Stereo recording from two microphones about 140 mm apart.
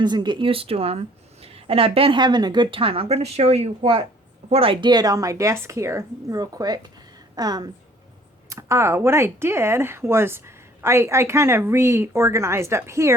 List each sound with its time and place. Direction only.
0.0 s speech: 30° right (ahead or behind)